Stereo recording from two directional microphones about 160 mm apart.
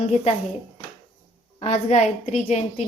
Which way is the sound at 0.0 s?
40° left (ahead or behind).